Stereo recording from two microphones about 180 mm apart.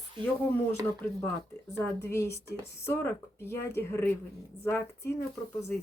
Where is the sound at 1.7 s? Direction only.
15° left (ahead or behind).